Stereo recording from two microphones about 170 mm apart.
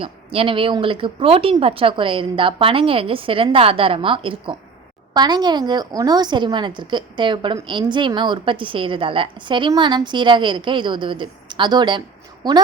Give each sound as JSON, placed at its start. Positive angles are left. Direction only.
{"t": 0.0, "sound": "a woman's voice", "side_deg": -35}